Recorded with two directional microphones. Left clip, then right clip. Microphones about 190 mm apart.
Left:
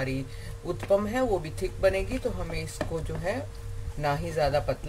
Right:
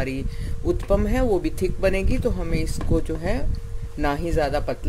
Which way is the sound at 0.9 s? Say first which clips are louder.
Right 2 dB; 50° right (ahead or behind).